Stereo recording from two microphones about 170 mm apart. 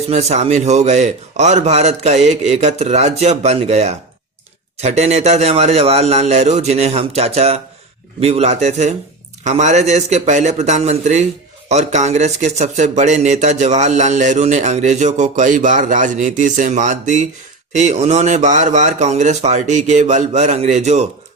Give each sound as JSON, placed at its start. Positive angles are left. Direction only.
{"t": 0.1, "sound": "a man's voice", "side_deg": -40}